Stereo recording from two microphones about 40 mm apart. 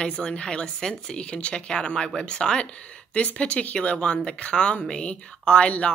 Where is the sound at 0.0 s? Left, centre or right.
Left.